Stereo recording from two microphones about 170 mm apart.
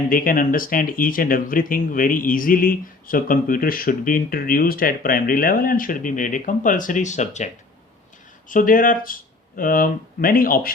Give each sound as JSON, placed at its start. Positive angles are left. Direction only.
{"t": 0.1, "sound": "speech", "side_deg": 55}